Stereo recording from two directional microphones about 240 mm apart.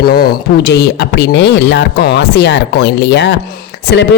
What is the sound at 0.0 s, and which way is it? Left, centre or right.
Speech, left.